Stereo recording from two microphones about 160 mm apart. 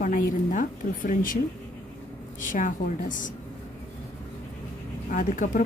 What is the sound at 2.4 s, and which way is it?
Speech, 55° left (ahead or behind).